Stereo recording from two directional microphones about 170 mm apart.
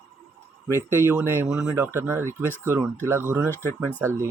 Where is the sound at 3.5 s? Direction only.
10° left (ahead or behind).